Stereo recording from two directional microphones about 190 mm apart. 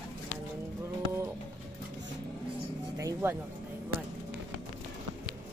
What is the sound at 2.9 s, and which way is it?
Music, 15° right (ahead or behind).